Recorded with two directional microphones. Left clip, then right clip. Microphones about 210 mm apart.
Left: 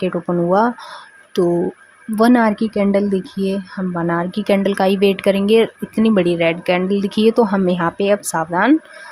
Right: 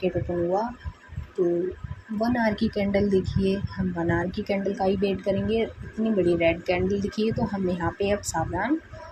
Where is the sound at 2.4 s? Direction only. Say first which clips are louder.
Left 9 dB; 25° left (ahead or behind).